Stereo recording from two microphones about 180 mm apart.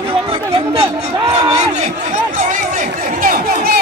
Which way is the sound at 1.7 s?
40° right (ahead or behind).